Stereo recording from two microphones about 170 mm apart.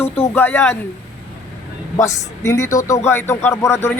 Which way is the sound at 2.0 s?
15° left (ahead or behind).